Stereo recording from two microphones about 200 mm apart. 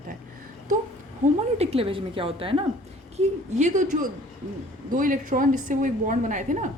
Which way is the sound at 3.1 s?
40° right (ahead or behind).